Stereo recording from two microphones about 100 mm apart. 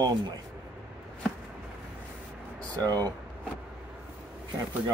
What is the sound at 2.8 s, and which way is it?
Speech, 40° right (ahead or behind).